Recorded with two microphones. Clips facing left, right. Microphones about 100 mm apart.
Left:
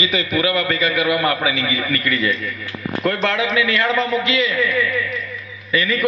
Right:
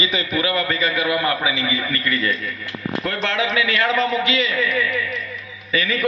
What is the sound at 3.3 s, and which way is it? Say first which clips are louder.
Speech: left 2 dB; 30° right (ahead or behind).